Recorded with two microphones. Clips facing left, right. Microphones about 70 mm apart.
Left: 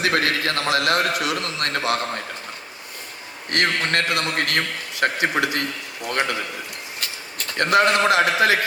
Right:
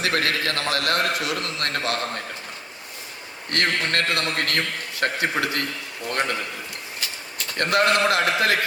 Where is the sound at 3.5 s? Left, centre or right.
Centre.